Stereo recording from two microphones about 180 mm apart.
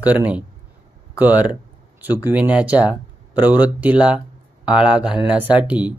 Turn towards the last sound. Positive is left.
turn(degrees=-5)  # may be behind; listen again after turning